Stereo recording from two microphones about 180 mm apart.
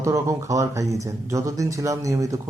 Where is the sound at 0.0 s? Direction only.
15° right (ahead or behind).